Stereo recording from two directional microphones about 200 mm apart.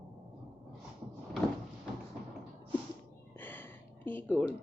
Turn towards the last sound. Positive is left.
turn(degrees=5)  # may be behind; listen again after turning